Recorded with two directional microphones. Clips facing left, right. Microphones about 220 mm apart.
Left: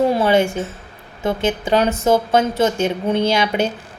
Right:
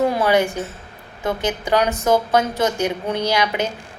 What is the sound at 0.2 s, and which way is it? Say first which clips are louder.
A woman's voice: left 2 dB; 25° left (ahead or behind).